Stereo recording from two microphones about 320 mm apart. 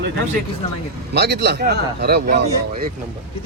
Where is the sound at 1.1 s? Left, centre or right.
Right.